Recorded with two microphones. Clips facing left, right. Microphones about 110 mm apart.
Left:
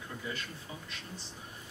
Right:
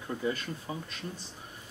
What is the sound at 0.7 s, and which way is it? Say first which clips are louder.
Speech: right 12 dB; 45° right (ahead or behind).